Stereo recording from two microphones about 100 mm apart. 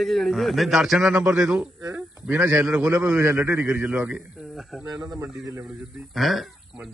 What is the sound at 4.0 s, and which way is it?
Speech, 10° right (ahead or behind).